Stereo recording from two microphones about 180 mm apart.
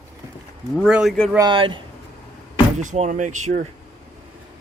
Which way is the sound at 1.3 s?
25° right (ahead or behind).